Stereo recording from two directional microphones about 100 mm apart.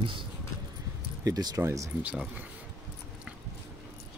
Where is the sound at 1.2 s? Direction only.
40° right (ahead or behind).